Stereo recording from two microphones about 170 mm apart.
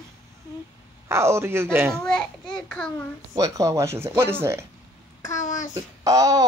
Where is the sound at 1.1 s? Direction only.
15° right (ahead or behind).